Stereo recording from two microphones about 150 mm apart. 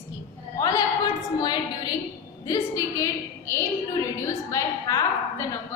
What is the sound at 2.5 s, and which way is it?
Speech, 20° left (ahead or behind).